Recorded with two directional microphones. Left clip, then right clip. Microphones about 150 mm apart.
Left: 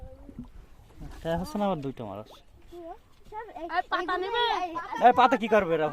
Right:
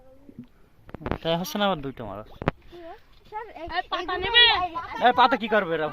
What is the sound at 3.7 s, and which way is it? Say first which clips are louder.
Speech: even; 20° left (ahead or behind).